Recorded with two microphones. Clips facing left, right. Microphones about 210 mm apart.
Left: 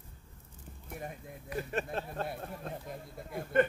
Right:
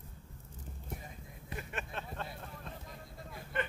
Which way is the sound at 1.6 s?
35° left (ahead or behind).